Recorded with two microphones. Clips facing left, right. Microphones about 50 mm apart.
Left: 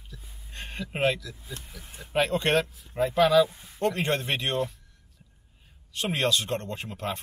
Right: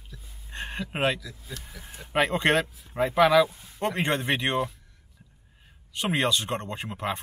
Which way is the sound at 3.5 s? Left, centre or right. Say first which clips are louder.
Even; centre.